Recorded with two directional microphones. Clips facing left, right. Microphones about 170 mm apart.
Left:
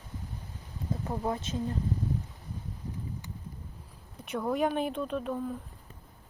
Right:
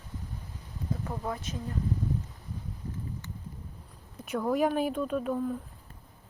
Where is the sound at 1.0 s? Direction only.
25° left (ahead or behind).